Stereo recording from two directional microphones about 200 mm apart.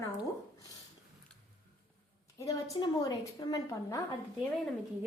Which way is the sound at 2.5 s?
15° left (ahead or behind).